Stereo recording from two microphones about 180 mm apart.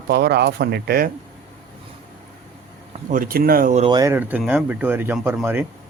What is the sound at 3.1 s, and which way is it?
Speech, 50° right (ahead or behind).